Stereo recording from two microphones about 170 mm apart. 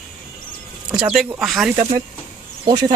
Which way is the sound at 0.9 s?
5° right (ahead or behind).